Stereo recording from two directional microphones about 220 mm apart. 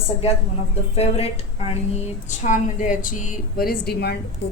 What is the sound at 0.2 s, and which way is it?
A woman's voice, 30° left (ahead or behind).